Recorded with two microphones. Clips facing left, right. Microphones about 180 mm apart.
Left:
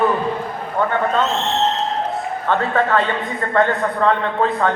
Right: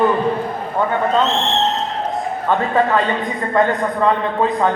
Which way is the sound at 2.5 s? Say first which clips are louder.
Right 1 dB; 15° right (ahead or behind).